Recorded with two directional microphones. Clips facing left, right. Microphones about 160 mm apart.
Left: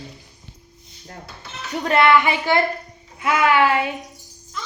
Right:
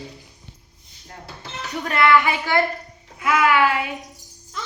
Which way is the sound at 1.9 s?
25° left (ahead or behind).